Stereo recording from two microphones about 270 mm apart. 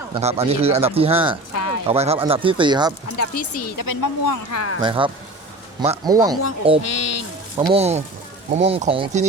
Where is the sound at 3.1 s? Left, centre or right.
Left.